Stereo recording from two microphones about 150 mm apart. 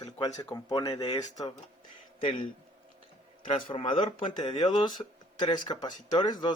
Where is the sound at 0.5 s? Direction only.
25° left (ahead or behind).